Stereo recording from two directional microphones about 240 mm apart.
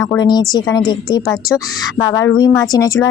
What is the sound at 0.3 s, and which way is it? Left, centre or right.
Speech, centre.